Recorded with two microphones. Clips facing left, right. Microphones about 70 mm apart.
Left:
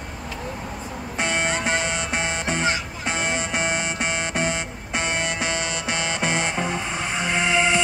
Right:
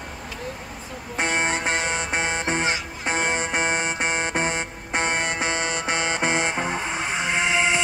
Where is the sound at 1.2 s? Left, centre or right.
Right.